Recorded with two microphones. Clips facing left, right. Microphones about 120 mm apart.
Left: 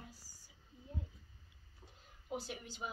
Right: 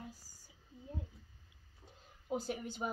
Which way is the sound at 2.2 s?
45° right (ahead or behind).